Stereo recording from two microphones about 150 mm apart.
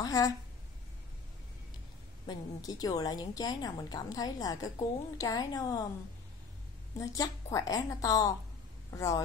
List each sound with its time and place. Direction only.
0.0 s a sound: 25° left (ahead or behind)
2.2 s a woman's voice: 25° left (ahead or behind)
7.0 s a woman's voice: 25° left (ahead or behind)